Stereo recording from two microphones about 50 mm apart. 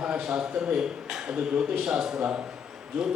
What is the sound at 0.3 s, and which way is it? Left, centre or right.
A man's voice, centre.